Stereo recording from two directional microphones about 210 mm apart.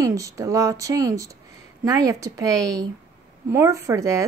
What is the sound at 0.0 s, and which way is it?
Speech, 15° right (ahead or behind).